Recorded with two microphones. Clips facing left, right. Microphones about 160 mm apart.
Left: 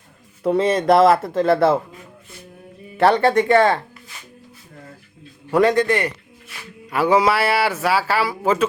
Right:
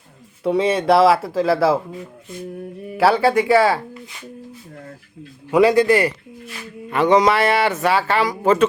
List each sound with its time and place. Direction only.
0.4 s speech: centre (ahead or behind)
3.0 s speech: 5° right (ahead or behind)
5.5 s speech: 5° right (ahead or behind)
6.9 s speech: 5° left (ahead or behind)